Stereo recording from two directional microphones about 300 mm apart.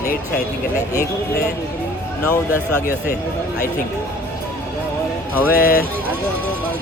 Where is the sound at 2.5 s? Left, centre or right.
Centre.